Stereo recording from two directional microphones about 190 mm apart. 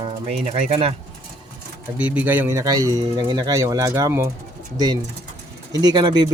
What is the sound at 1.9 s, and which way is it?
Speech, 10° right (ahead or behind).